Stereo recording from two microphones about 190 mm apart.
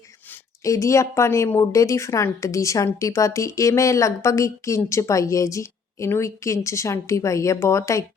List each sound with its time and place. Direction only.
0.6 s speech: 15° left (ahead or behind)